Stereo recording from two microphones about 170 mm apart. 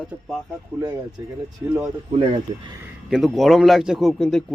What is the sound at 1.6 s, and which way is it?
Speech, 10° right (ahead or behind).